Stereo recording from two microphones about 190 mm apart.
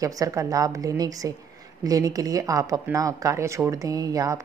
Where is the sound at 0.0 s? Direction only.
15° right (ahead or behind).